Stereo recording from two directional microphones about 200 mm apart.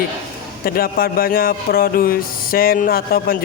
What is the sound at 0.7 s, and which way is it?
A man's voice, 45° left (ahead or behind).